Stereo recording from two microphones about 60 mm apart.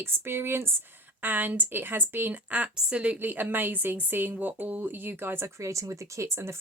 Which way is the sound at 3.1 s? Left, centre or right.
Right.